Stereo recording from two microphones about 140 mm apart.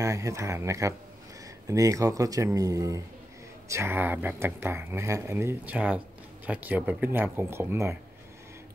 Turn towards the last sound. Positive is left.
turn(degrees=-15)  # may be behind; listen again after turning